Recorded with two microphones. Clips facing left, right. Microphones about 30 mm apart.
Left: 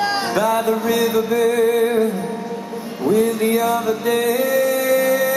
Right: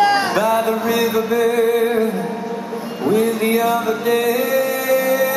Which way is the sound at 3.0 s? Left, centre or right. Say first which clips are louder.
Even; right.